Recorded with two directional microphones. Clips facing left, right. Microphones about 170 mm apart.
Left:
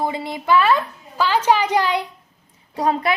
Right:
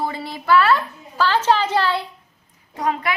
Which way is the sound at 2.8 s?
30° left (ahead or behind).